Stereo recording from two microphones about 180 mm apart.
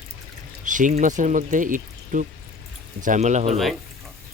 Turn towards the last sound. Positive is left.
turn(degrees=-40)  # may be behind; listen again after turning